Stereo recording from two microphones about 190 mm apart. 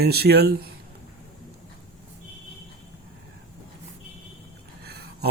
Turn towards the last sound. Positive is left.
turn(degrees=-55)  # may be behind; listen again after turning